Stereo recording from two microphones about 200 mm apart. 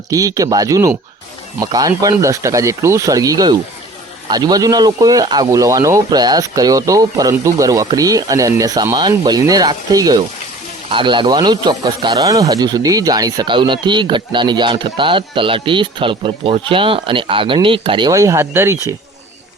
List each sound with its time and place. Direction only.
0.1 s speech: 15° right (ahead or behind)